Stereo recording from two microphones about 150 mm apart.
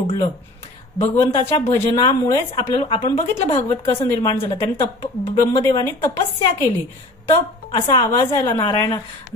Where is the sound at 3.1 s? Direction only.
40° left (ahead or behind).